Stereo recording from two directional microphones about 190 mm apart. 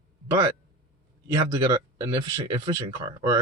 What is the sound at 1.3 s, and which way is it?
Speech, 15° right (ahead or behind).